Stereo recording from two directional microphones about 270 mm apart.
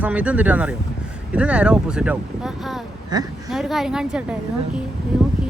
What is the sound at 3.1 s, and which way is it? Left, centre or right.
Speech, centre.